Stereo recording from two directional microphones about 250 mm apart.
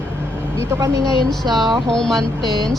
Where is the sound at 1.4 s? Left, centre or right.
Centre.